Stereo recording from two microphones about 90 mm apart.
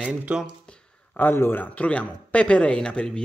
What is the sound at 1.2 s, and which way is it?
Speech, 25° left (ahead or behind).